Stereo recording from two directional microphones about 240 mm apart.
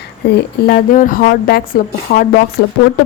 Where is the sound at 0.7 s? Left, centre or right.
Left.